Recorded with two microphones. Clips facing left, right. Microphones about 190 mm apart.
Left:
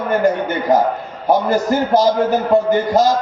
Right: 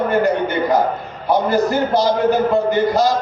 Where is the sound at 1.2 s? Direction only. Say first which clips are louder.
Left 1 dB; 45° left (ahead or behind).